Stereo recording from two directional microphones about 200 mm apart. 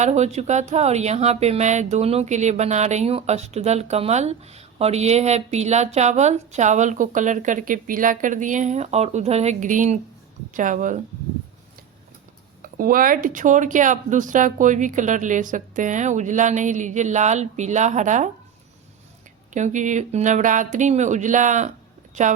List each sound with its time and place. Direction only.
0.0 s speech: 35° right (ahead or behind)
12.7 s speech: 45° right (ahead or behind)
19.5 s speech: 40° right (ahead or behind)